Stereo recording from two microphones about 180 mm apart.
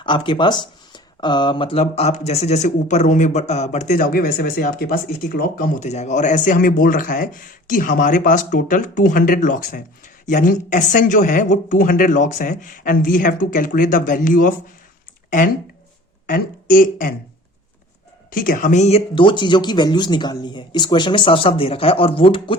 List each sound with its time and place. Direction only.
0.0 s speech: 25° left (ahead or behind); by 14.5 s 50° left (ahead or behind)
16.2 s speech: 50° left (ahead or behind)
18.3 s speech: 50° left (ahead or behind); by 22.5 s 30° left (ahead or behind)